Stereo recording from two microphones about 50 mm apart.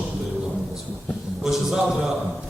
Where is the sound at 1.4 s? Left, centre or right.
Centre.